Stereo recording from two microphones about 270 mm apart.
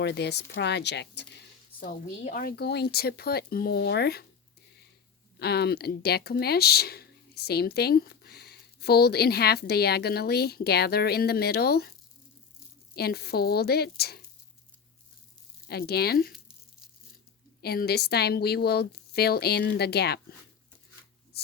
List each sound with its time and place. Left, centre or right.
0.0 s speech: left
5.4 s speech: left
13.0 s speech: left
15.6 s speech: left
17.6 s speech: left